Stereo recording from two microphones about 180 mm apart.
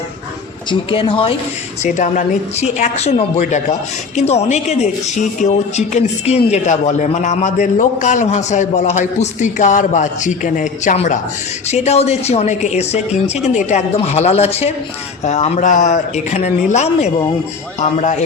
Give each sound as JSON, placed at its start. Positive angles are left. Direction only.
{"t": 0.7, "sound": "speech", "side_deg": 30}
{"t": 1.8, "sound": "a woman's voice", "side_deg": 40}